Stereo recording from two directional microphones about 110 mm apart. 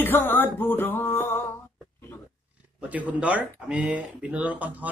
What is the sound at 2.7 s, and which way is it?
Speech, 15° right (ahead or behind).